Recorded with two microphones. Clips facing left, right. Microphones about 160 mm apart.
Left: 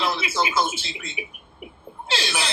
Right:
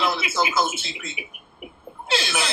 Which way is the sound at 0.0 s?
30° left (ahead or behind).